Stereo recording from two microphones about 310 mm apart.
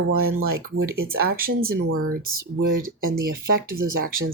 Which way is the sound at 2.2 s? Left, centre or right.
Right.